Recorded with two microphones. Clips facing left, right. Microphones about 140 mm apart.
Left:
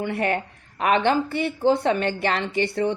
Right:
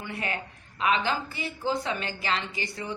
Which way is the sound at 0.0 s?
55° left (ahead or behind).